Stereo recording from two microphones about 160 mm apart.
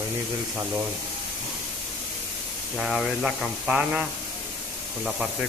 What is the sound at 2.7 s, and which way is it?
Speech, centre (ahead or behind).